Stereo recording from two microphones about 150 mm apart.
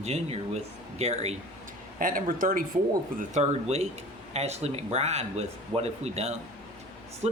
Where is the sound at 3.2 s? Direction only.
50° right (ahead or behind).